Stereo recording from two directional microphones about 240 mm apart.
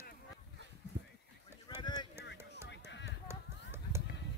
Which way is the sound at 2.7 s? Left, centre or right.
Left.